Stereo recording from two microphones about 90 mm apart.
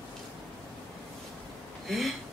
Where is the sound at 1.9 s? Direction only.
Centre (ahead or behind).